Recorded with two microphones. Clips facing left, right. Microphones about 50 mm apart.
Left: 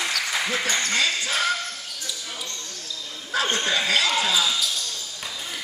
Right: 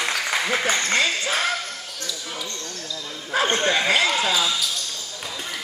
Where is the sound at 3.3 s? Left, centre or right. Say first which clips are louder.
Right 3 dB; right.